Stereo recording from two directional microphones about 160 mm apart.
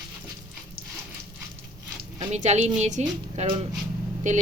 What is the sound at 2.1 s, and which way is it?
A woman's voice, 45° right (ahead or behind).